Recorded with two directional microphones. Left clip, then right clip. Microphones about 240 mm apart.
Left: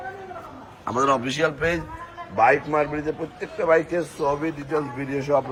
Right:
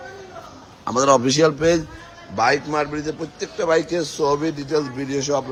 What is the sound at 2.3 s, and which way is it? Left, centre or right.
A man's voice, centre.